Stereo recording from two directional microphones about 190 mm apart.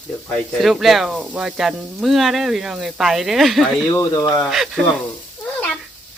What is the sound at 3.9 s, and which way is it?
Speech, 15° left (ahead or behind).